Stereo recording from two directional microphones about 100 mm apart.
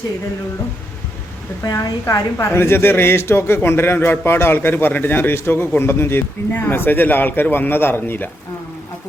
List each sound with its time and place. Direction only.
1.7 s a woman's voice: 30° left (ahead or behind)